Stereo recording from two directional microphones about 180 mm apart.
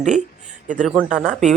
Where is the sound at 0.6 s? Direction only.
45° right (ahead or behind).